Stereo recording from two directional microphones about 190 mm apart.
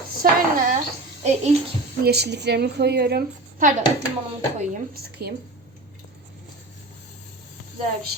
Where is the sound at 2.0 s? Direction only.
60° right (ahead or behind).